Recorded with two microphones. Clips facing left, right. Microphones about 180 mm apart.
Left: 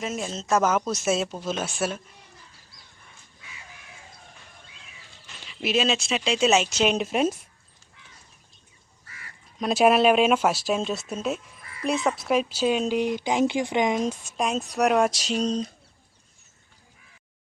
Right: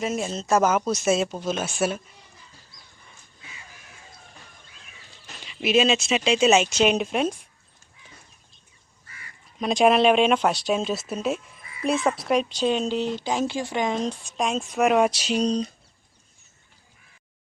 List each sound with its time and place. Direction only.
0.0 s speech: centre (ahead or behind)
5.6 s speech: centre (ahead or behind)
9.6 s speech: 5° left (ahead or behind)